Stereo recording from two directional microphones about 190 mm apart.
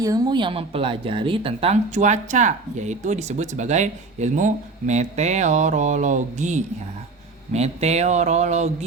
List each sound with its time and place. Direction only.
0.0 s speech: 20° right (ahead or behind); by 8.7 s 35° right (ahead or behind)